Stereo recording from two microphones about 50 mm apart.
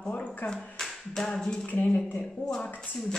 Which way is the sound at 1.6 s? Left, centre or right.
Left.